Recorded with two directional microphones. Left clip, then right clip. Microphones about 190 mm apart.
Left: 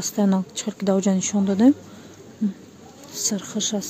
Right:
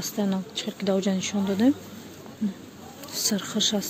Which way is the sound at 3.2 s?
15° left (ahead or behind).